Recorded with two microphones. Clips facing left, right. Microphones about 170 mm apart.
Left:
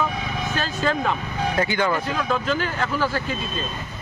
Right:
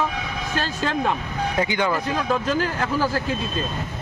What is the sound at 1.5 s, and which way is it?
Speech, 15° right (ahead or behind).